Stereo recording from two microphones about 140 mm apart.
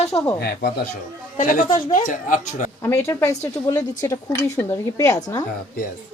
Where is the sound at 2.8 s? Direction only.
20° left (ahead or behind).